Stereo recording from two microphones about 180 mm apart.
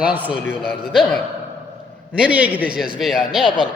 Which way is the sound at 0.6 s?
60° left (ahead or behind).